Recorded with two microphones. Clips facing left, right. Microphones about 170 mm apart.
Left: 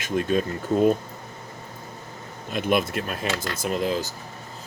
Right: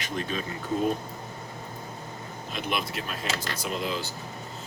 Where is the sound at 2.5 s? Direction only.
50° left (ahead or behind).